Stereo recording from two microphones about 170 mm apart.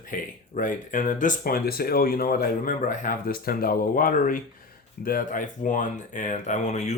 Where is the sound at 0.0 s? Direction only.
50° left (ahead or behind).